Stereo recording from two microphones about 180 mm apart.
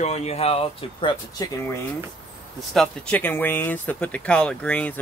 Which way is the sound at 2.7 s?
5° left (ahead or behind).